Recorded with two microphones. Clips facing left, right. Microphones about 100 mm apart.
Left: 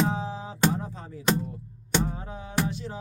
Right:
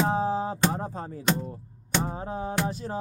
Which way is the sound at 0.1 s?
40° right (ahead or behind).